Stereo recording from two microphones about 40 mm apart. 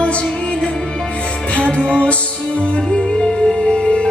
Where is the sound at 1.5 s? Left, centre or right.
Left.